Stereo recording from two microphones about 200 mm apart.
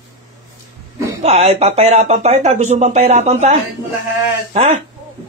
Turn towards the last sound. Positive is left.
turn(degrees=-35)  # may be behind; listen again after turning